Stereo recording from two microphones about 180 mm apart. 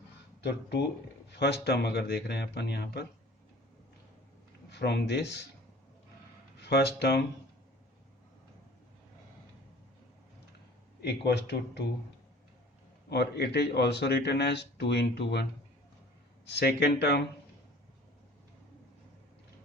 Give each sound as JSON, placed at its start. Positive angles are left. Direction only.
{"t": 0.4, "sound": "speech", "side_deg": 70}
{"t": 4.7, "sound": "speech", "side_deg": 70}
{"t": 6.6, "sound": "speech", "side_deg": 65}
{"t": 11.0, "sound": "speech", "side_deg": 70}
{"t": 13.1, "sound": "speech", "side_deg": 65}
{"t": 16.6, "sound": "speech", "side_deg": 65}